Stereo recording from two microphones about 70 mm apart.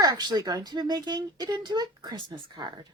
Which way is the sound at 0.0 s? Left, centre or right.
Right.